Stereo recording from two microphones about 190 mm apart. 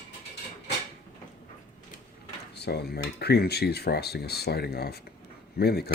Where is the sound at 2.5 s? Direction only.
60° left (ahead or behind).